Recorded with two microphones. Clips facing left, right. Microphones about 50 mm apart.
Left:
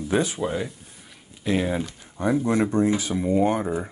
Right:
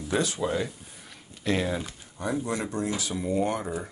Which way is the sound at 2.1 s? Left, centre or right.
Left.